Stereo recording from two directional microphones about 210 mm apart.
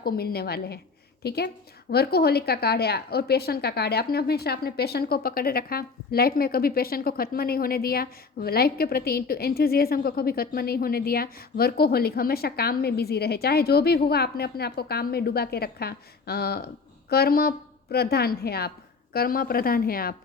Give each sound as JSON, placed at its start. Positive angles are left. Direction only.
{"t": 0.0, "sound": "a woman's voice", "side_deg": 45}